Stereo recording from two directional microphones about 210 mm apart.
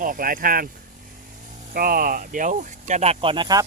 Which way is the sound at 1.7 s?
45° right (ahead or behind).